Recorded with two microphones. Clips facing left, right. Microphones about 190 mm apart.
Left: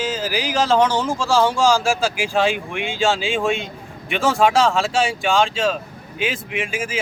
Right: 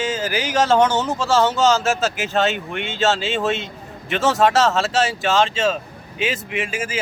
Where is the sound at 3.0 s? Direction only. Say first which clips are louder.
Even; centre (ahead or behind).